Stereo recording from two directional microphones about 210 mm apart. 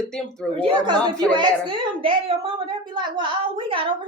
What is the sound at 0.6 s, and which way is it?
A woman's voice, 20° right (ahead or behind).